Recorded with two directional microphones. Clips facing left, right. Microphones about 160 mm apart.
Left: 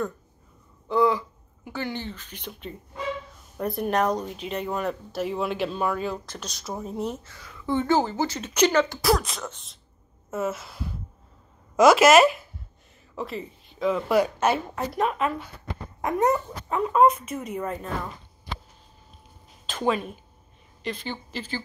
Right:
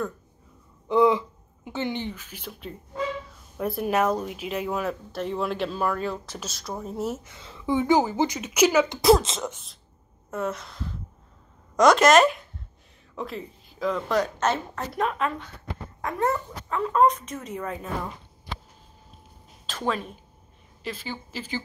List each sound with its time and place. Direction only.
0.8 s a woman's voice: 20° right (ahead or behind); by 7.2 s centre (ahead or behind)
7.2 s speech: 25° right (ahead or behind)
7.6 s speech: 15° right (ahead or behind)
8.8 s speech: 20° right (ahead or behind)
9.5 s speech: centre (ahead or behind)
16.0 s a sound: 20° left (ahead or behind)
16.9 s speech: 5° left (ahead or behind)
19.6 s speech: centre (ahead or behind)